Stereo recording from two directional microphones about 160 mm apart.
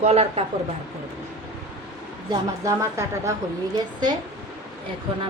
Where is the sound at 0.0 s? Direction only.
40° right (ahead or behind).